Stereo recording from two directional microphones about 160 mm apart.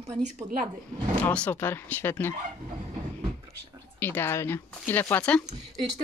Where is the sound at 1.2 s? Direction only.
10° left (ahead or behind).